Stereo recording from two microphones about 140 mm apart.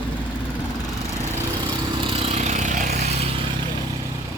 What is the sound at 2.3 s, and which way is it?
Vehicle, 55° right (ahead or behind).